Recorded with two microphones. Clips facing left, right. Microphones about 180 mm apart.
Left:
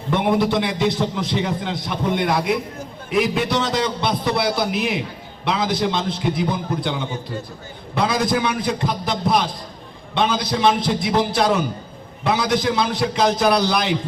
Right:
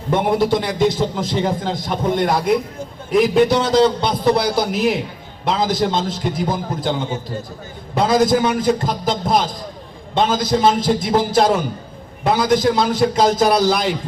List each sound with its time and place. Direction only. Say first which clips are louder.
0.1 s a man's voice: right 2 dB; 45° right (ahead or behind)